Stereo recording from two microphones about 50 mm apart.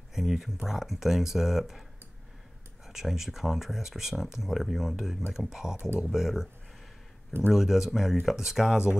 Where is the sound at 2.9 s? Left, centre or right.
Centre.